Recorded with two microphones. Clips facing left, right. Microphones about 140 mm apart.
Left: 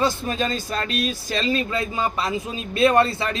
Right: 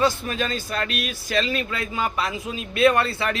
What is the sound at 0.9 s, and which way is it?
A man's voice, 30° left (ahead or behind).